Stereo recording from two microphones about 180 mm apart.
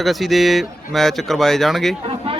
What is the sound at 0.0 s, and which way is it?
A man's voice, centre (ahead or behind).